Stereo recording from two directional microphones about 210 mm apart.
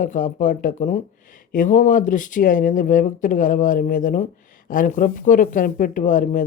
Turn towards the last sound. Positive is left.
turn(degrees=35)  # may be behind; listen again after turning